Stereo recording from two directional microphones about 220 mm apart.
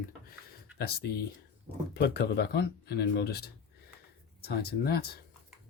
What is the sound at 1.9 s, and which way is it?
Speech, 45° left (ahead or behind).